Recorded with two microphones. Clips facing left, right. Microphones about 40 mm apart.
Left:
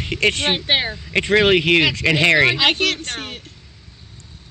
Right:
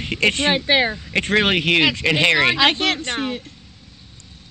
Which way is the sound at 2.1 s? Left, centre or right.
Centre.